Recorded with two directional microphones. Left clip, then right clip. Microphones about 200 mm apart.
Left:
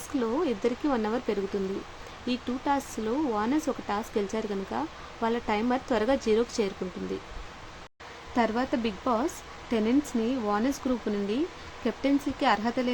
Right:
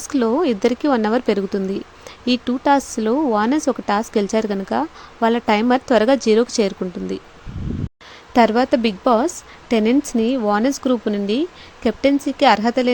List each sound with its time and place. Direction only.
0.1 s speech: 40° right (ahead or behind)
8.4 s speech: 40° right (ahead or behind)